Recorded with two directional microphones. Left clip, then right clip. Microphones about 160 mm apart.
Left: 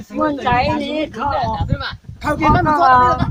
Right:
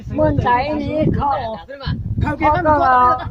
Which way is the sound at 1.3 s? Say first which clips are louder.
Left 1 dB; 5° right (ahead or behind).